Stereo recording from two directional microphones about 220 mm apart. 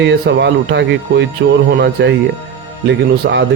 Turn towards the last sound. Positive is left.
turn(degrees=-50)  # may be behind; listen again after turning